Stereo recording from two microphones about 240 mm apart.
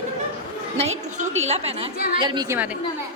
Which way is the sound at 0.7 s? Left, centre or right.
Right.